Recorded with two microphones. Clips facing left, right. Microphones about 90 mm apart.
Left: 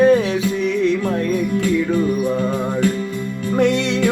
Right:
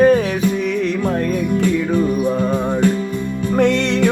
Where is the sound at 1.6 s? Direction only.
20° right (ahead or behind).